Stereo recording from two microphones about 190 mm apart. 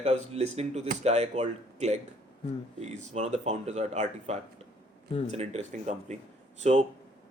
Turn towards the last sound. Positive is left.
turn(degrees=-40)  # may be behind; listen again after turning